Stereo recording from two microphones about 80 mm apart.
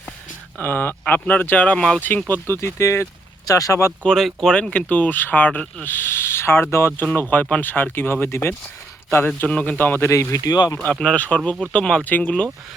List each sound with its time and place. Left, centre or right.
0.6 s speech: left; by 2.0 s centre
2.0 s speech: left
4.0 s speech: centre; by 10.8 s left
10.8 s speech: centre